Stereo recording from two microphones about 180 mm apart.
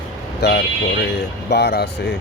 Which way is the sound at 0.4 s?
65° left (ahead or behind).